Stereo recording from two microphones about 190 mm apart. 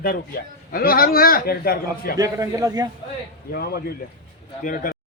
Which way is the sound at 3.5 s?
55° left (ahead or behind).